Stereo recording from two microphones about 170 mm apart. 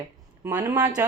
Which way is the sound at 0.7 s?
20° right (ahead or behind).